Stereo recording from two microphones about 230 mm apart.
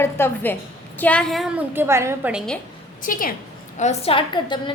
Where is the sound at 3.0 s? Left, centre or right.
Left.